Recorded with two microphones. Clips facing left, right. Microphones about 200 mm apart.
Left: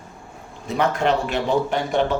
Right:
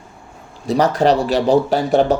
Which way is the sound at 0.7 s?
35° right (ahead or behind).